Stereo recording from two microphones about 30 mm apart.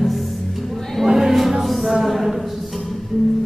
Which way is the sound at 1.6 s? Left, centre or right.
Centre.